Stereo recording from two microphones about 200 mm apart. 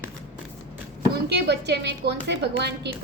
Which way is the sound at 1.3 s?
55° right (ahead or behind).